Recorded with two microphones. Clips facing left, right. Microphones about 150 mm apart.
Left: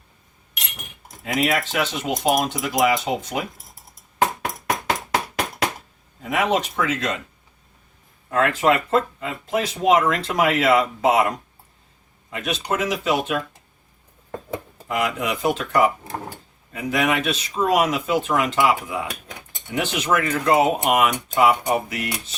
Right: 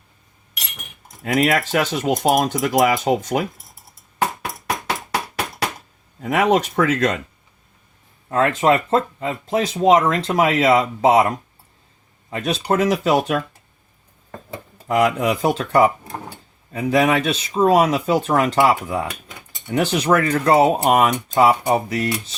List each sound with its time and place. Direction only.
1.2 s speech: 45° right (ahead or behind)
6.3 s speech: 45° right (ahead or behind)
8.3 s speech: 30° right (ahead or behind)
14.8 s speech: 40° right (ahead or behind)